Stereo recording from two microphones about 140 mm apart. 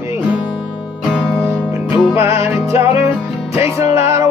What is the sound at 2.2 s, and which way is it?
Music, 20° right (ahead or behind).